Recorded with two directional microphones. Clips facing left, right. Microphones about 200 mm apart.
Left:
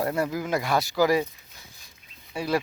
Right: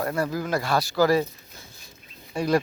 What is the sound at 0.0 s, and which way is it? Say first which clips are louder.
Speech: even; 20° left (ahead or behind).